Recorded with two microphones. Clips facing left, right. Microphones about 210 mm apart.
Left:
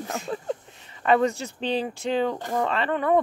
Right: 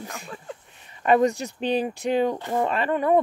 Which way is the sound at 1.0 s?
15° right (ahead or behind).